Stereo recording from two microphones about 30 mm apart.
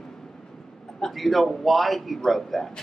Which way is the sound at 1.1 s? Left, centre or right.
Centre.